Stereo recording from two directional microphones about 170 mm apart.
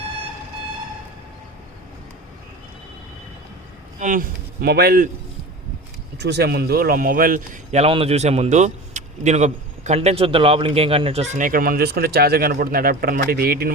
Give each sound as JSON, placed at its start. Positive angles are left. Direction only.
{"t": 4.0, "sound": "a man's voice", "side_deg": -55}
{"t": 6.1, "sound": "a man's voice", "side_deg": -75}